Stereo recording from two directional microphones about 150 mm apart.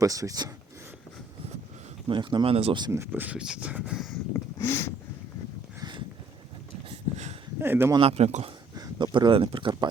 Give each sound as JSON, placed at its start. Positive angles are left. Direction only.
{"t": 0.0, "sound": "speech", "side_deg": -20}
{"t": 2.0, "sound": "speech", "side_deg": -35}
{"t": 2.9, "sound": "speech", "side_deg": -15}
{"t": 4.6, "sound": "a sound", "side_deg": 15}
{"t": 6.9, "sound": "a sound", "side_deg": -50}
{"t": 7.6, "sound": "speech", "side_deg": -15}
{"t": 7.9, "sound": "speech", "side_deg": -40}
{"t": 8.7, "sound": "speech", "side_deg": -30}